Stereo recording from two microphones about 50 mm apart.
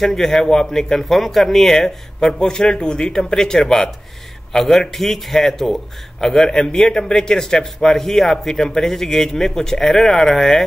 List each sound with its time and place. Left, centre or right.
0.0 s a man's voice: centre